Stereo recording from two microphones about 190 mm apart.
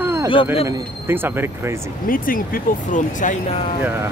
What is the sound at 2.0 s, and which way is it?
Speech, 45° left (ahead or behind).